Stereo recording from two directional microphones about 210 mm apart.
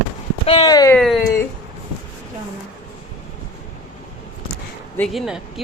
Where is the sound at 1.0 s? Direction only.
Centre (ahead or behind).